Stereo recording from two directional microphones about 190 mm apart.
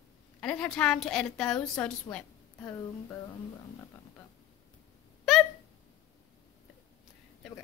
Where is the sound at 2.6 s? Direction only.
15° left (ahead or behind).